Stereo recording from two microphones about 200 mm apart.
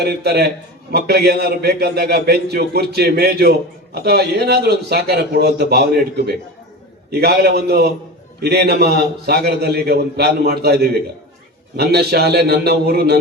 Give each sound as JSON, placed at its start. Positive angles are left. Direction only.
{"t": 0.0, "sound": "a man's voice", "side_deg": -50}